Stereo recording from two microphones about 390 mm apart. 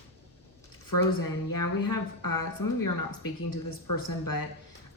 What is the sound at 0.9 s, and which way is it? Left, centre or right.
A woman's voice, left.